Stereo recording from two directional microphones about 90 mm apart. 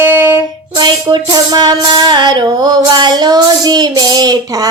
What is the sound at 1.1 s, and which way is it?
Music, 55° right (ahead or behind).